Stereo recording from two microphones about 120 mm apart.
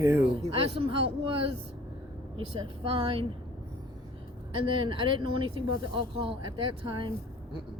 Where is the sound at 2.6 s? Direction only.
50° right (ahead or behind).